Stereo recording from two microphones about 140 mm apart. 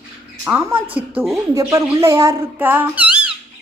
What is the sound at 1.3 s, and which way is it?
Speech, 25° right (ahead or behind).